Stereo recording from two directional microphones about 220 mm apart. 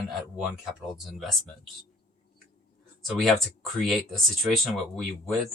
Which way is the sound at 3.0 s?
Centre (ahead or behind).